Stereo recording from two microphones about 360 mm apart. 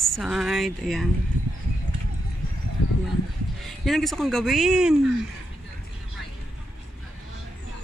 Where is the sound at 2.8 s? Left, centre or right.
Left.